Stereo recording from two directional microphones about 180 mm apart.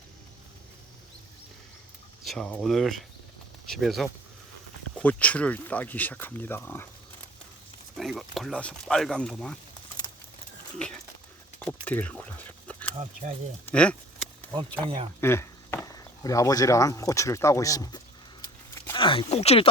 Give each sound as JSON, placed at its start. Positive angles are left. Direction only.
{"t": 2.2, "sound": "speech", "side_deg": 0}
{"t": 7.9, "sound": "speech", "side_deg": 0}
{"t": 10.0, "sound": "a sound", "side_deg": 25}
{"t": 11.6, "sound": "a sound", "side_deg": 10}
{"t": 13.7, "sound": "speech", "side_deg": 5}
{"t": 14.5, "sound": "speech", "side_deg": -25}
{"t": 15.2, "sound": "speech", "side_deg": 15}
{"t": 18.4, "sound": "a sound", "side_deg": 20}
{"t": 19.0, "sound": "speech", "side_deg": 30}